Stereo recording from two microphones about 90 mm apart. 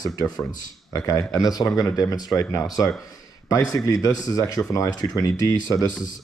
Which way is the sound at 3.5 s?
40° left (ahead or behind).